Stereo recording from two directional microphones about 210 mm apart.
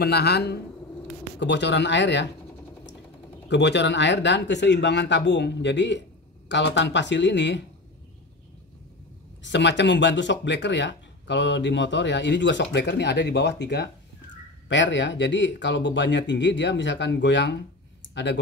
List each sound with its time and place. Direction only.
0.0 s a man's voice: 50° left (ahead or behind)
3.4 s speech: 55° left (ahead or behind)
9.4 s speech: 55° left (ahead or behind)